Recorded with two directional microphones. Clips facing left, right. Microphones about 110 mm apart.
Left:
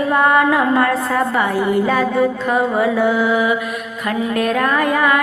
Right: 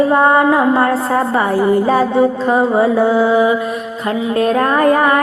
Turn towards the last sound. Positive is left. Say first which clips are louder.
# right 4 dB
turn(degrees=-35)  # may be behind; listen again after turning